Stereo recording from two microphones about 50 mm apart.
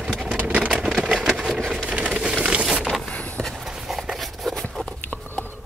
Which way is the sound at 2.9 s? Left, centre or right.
Centre.